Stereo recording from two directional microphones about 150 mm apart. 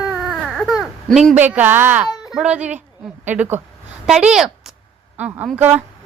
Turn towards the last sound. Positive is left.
turn(degrees=-10)  # may be behind; listen again after turning